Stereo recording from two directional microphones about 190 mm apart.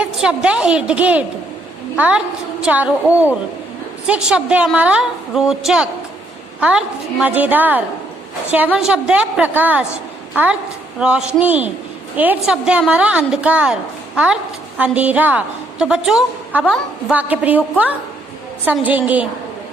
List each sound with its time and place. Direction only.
0.0 s a woman's voice: 5° right (ahead or behind)
14.8 s a woman's voice: 5° right (ahead or behind)
18.6 s a woman's voice: 10° right (ahead or behind)